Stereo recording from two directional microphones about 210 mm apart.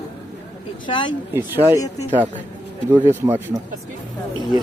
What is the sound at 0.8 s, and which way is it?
Speech, 25° left (ahead or behind).